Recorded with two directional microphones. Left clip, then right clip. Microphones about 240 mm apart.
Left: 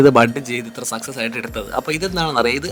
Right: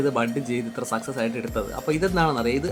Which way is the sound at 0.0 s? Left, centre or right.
Left.